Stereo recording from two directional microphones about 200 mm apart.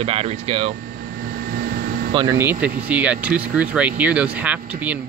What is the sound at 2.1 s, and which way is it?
Speech, 15° right (ahead or behind).